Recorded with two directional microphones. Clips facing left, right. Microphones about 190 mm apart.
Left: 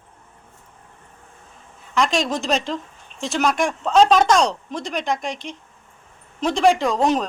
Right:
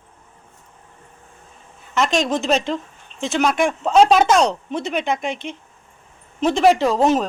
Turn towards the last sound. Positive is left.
turn(degrees=-5)  # may be behind; listen again after turning